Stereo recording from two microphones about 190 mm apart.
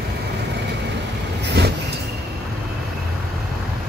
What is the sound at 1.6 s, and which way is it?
Vehicle, 60° right (ahead or behind).